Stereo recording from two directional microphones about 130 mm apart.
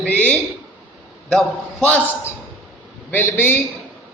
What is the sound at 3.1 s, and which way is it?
Speech, 15° left (ahead or behind).